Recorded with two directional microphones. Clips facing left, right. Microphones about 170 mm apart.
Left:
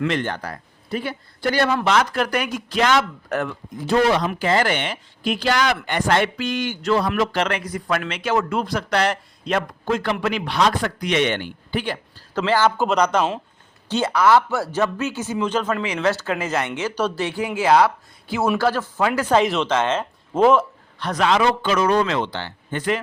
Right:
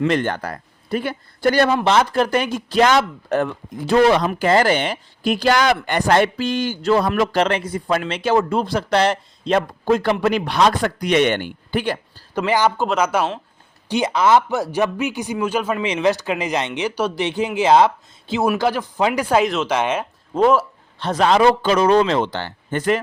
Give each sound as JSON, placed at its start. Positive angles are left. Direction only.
{"t": 0.1, "sound": "a man's voice", "side_deg": -45}
{"t": 1.7, "sound": "speech", "side_deg": -30}
{"t": 3.8, "sound": "speech", "side_deg": -60}
{"t": 4.3, "sound": "speech", "side_deg": -40}
{"t": 12.3, "sound": "speech", "side_deg": -15}
{"t": 12.7, "sound": "speech", "side_deg": 0}
{"t": 20.3, "sound": "speech", "side_deg": 0}
{"t": 21.0, "sound": "speech", "side_deg": -30}
{"t": 22.2, "sound": "a man's voice", "side_deg": -45}